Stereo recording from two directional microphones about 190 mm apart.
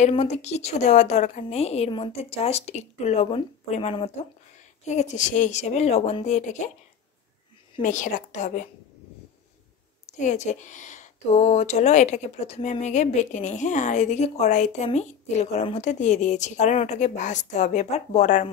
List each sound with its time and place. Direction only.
0.1 s speech: 35° left (ahead or behind)
7.8 s speech: 40° left (ahead or behind)
10.1 s speech: 40° left (ahead or behind)